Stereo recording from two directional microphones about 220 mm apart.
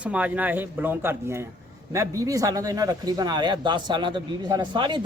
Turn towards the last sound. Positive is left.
turn(degrees=-20)  # may be behind; listen again after turning